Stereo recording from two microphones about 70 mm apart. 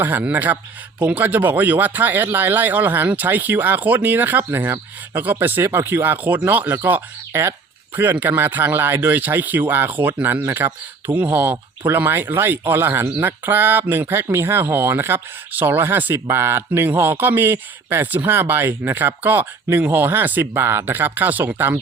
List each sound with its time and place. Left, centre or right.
0.0 s speech: right